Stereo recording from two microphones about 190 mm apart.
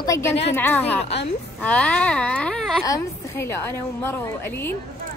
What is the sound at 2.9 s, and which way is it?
A woman's voice, 15° left (ahead or behind).